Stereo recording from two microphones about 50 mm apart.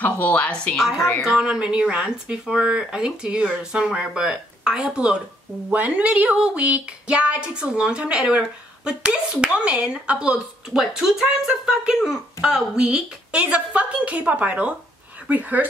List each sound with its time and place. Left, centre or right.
0.0 s speech: left
0.7 s a woman's voice: centre
1.2 s speech: centre
5.7 s speech: right
10.7 s speech: centre
12.5 s speech: right